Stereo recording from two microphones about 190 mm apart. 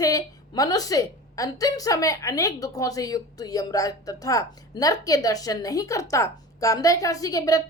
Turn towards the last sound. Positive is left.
turn(degrees=20)  # may be behind; listen again after turning